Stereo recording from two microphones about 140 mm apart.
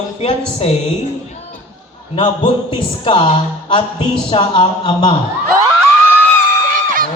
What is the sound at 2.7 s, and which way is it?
A woman's voice, 40° left (ahead or behind).